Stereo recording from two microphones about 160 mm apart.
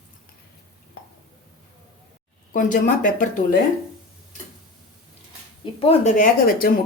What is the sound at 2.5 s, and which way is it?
Speech, 55° left (ahead or behind).